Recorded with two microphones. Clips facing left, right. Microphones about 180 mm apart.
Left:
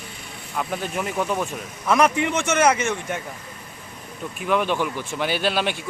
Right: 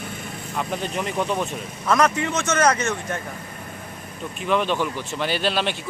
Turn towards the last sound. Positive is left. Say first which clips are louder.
# even
turn(degrees=10)  # may be behind; listen again after turning